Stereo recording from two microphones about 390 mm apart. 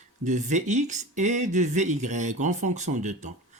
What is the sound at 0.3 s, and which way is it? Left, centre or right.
Speech, centre.